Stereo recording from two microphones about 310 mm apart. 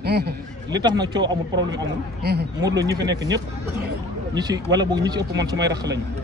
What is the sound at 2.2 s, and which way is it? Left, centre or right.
Speech, right.